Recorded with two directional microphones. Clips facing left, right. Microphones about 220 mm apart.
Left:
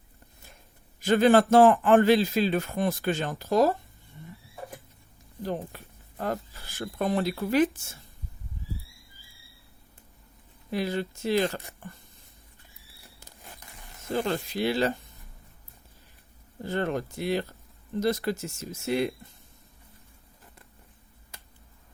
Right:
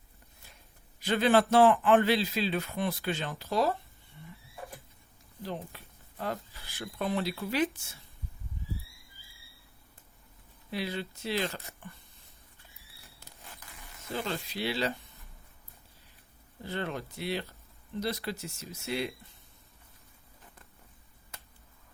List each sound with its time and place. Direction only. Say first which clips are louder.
0.9 s a man's voice: left 5 dB; 45° left (ahead or behind)
5.4 s speech: left 6 dB; 45° left (ahead or behind)
10.7 s a man's voice: left 6 dB; 45° left (ahead or behind)
14.1 s a man's voice: left 7 dB; 45° left (ahead or behind)
16.6 s a man's voice: left 7 dB; 45° left (ahead or behind)